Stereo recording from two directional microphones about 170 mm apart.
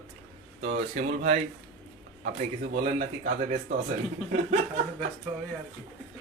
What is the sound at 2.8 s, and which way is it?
Speech, 55° right (ahead or behind).